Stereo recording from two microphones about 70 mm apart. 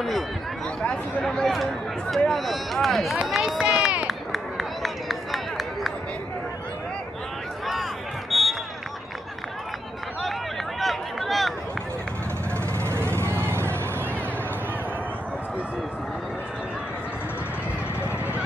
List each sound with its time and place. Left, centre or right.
0.8 s speech: centre
4.1 s run: centre
8.3 s a sound: centre
10.8 s run: centre
12.7 s vehicle: right
18.0 s a sound: left